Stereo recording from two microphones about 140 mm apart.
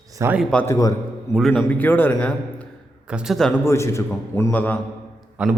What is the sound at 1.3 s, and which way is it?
Speech, centre (ahead or behind).